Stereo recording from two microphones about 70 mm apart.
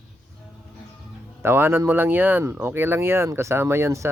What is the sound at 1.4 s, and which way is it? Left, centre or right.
Speech, right.